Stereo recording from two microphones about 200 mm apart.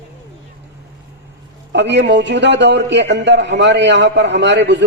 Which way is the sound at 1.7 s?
60° right (ahead or behind).